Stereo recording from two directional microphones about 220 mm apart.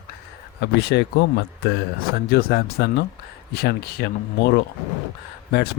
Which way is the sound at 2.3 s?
45° left (ahead or behind).